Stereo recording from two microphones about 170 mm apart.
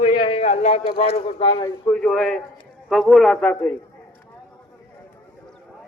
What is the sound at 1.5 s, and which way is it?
Speech, 25° left (ahead or behind).